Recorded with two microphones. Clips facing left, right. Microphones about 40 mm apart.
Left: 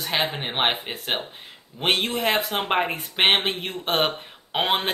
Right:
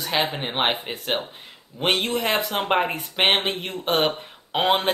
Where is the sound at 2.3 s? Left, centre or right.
Left.